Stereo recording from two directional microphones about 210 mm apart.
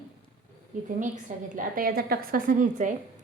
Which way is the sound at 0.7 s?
35° right (ahead or behind).